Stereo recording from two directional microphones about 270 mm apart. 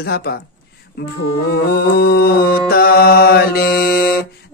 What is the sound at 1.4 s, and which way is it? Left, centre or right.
Mantra, left.